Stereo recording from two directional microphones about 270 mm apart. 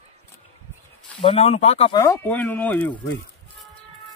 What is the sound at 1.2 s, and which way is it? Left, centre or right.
Speech, left.